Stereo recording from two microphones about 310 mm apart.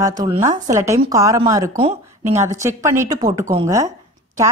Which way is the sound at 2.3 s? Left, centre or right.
Centre.